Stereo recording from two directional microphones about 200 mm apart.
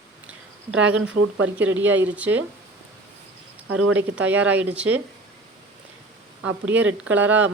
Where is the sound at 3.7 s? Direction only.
90° right.